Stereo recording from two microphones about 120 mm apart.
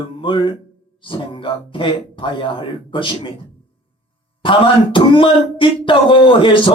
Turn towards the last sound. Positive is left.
turn(degrees=45)  # may be behind; listen again after turning